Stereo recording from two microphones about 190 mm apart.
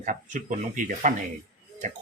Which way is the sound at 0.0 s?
45° right (ahead or behind).